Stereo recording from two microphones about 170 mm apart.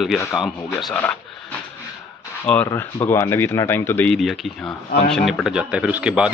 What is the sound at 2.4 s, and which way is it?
Speech, 10° left (ahead or behind).